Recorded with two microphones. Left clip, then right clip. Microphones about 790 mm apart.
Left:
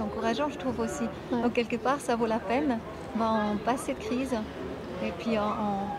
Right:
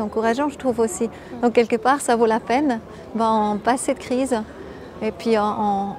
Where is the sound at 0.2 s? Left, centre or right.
Right.